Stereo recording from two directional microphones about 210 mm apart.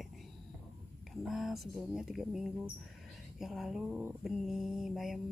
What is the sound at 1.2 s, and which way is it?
Mantra, centre (ahead or behind).